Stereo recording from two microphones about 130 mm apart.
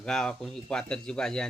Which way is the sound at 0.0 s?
5° left (ahead or behind).